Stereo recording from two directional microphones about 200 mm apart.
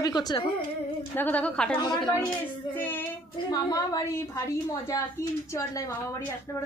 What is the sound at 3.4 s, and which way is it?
A woman's voice, 15° left (ahead or behind).